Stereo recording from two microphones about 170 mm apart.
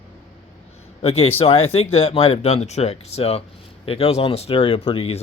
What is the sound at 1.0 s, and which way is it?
A man's voice, 35° left (ahead or behind).